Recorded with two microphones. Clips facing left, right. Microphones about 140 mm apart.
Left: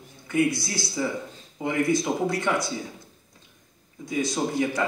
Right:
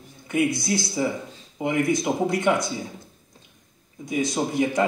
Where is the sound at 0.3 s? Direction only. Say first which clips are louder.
Right 1 dB; 20° right (ahead or behind).